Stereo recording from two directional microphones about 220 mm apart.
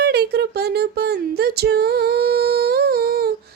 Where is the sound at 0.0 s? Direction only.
50° right (ahead or behind).